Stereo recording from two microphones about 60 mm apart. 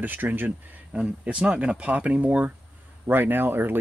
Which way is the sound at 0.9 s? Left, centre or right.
Centre.